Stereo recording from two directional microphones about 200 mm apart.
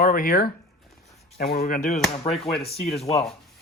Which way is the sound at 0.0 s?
45° left (ahead or behind).